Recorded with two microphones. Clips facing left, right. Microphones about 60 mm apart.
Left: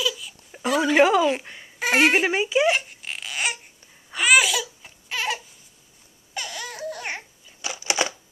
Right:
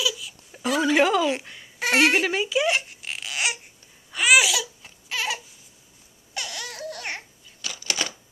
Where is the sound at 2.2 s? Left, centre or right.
Centre.